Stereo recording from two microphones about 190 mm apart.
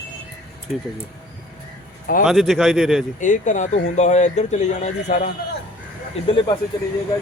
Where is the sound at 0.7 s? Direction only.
Centre (ahead or behind).